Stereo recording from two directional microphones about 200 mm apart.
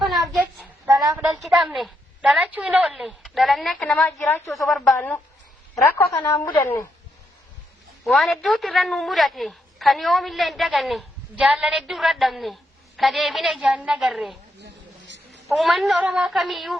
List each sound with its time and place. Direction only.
0.0 s child singing: centre (ahead or behind)
0.9 s a sound: 20° right (ahead or behind)
1.1 s a woman's voice: centre (ahead or behind)
4.5 s a woman's voice: centre (ahead or behind)
6.2 s a woman's voice: 15° left (ahead or behind)
8.0 s a woman's voice: centre (ahead or behind)
14.6 s a sound: 60° right (ahead or behind)
15.4 s a woman's voice: centre (ahead or behind)